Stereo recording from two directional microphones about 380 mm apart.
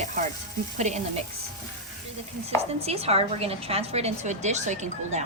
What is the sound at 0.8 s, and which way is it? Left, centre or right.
Speech, centre.